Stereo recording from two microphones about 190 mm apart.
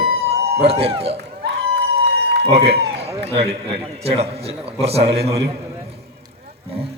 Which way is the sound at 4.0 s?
30° right (ahead or behind).